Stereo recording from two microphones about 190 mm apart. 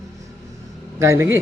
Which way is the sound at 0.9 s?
15° right (ahead or behind).